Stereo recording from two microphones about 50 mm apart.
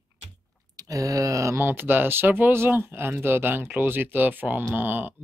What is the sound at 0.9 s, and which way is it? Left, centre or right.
Speech, right.